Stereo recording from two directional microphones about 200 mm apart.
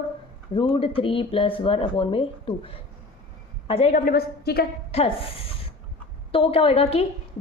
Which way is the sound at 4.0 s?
50° left (ahead or behind).